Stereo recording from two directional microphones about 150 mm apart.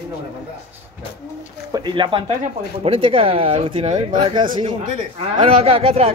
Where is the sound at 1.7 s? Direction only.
30° right (ahead or behind).